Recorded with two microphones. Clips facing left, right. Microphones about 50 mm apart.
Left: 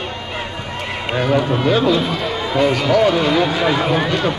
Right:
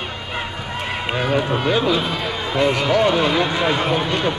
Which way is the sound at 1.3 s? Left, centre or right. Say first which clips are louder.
Left 3 dB; centre.